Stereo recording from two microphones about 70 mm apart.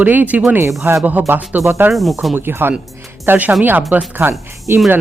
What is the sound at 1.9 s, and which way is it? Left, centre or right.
Speech, centre.